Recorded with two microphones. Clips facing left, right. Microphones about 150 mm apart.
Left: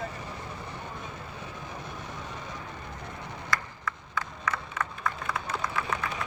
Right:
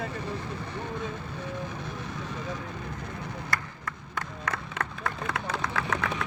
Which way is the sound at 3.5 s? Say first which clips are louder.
Left 1 dB; 55° right (ahead or behind).